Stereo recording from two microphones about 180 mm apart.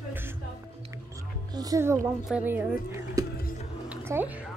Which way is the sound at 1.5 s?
20° right (ahead or behind).